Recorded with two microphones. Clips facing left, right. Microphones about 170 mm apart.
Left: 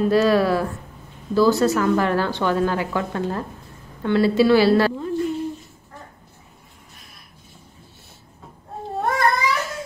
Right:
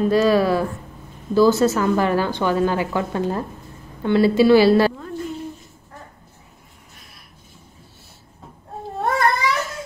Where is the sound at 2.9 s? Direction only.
15° right (ahead or behind).